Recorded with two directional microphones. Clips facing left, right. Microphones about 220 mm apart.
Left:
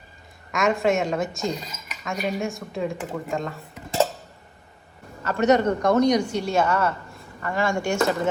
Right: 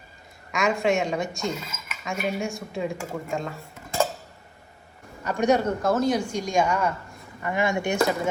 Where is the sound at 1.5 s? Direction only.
35° left (ahead or behind).